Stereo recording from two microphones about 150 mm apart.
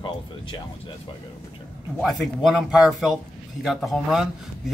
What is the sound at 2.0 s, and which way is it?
A man's voice, centre (ahead or behind).